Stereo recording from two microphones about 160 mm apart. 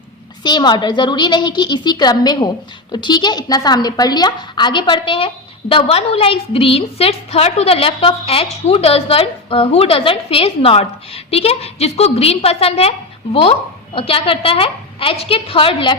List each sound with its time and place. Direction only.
0.4 s a woman's voice: 25° left (ahead or behind)